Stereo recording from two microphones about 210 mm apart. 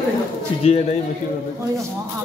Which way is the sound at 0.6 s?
30° left (ahead or behind).